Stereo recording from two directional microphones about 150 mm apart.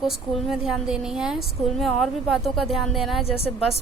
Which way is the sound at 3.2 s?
40° left (ahead or behind).